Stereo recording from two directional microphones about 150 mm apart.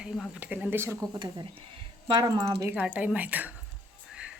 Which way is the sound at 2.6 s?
10° right (ahead or behind).